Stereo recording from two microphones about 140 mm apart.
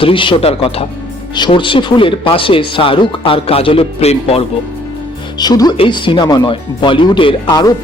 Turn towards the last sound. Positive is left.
turn(degrees=30)  # may be behind; listen again after turning